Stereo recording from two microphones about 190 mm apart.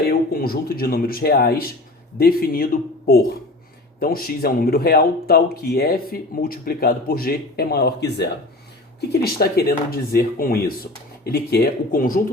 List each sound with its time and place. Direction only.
0.1 s speech: 50° left (ahead or behind)
4.0 s speech: 50° left (ahead or behind)